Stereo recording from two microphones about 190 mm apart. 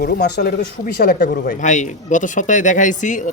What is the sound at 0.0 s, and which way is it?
Speech, 60° left (ahead or behind).